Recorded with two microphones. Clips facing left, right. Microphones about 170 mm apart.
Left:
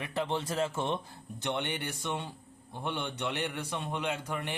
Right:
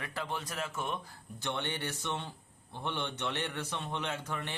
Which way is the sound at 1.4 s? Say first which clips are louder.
Left 3 dB; 15° left (ahead or behind).